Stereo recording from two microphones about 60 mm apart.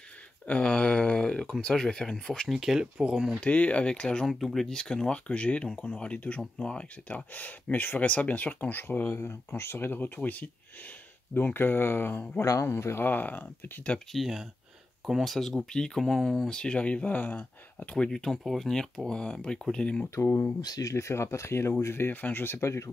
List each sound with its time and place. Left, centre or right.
0.5 s speech: centre
2.4 s speech: centre
3.3 s speech: left
4.3 s speech: centre; by 9.1 s left
9.1 s speech: left
13.9 s speech: centre
15.3 s speech: centre
16.4 s speech: centre
17.9 s speech: centre
20.2 s speech: left
20.6 s speech: left
20.9 s speech: left